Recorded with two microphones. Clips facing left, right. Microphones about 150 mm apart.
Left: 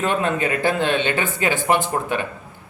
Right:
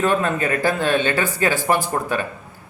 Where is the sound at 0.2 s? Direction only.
20° left (ahead or behind).